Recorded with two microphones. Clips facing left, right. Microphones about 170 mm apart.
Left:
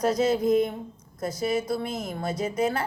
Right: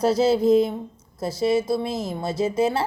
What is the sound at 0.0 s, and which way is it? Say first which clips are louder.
A woman's voice: right 4 dB; 30° right (ahead or behind).